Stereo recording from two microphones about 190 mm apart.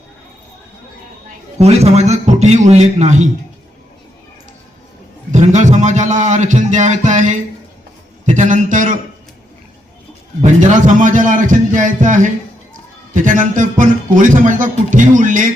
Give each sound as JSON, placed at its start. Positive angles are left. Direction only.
{"t": 1.5, "sound": "a man's voice", "side_deg": -35}
{"t": 5.3, "sound": "a man's voice", "side_deg": -40}
{"t": 10.4, "sound": "speech", "side_deg": -40}